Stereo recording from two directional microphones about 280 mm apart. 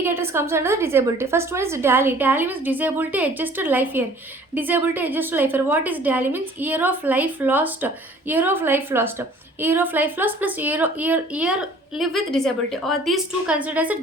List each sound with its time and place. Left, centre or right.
0.0 s a woman's voice: centre